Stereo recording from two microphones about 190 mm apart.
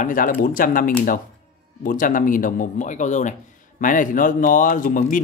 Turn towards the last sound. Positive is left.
turn(degrees=45)  # may be behind; listen again after turning